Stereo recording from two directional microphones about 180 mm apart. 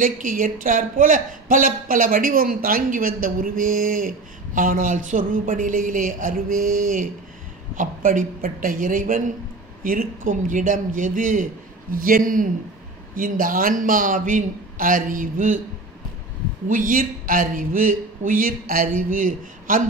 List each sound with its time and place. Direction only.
0.0 s a man's voice: 50° right (ahead or behind)
16.6 s a man's voice: 50° right (ahead or behind)